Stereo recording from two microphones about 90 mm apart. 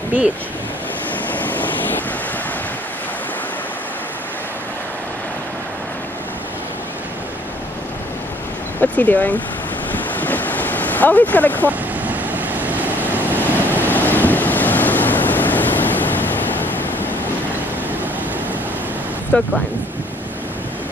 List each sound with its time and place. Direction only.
1.3 s vehicle: 20° left (ahead or behind)
8.9 s speech: 20° left (ahead or behind)
9.9 s waves: 20° left (ahead or behind)
12.1 s waves: 20° right (ahead or behind)
13.4 s waves: 20° left (ahead or behind)
19.3 s speech: 15° left (ahead or behind)